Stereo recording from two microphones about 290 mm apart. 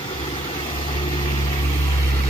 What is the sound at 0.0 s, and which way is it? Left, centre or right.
Vehicle, centre.